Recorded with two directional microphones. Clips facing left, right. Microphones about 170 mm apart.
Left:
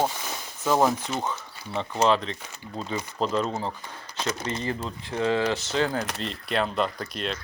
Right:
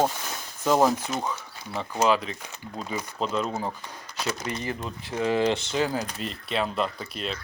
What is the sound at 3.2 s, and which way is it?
Speech, centre (ahead or behind).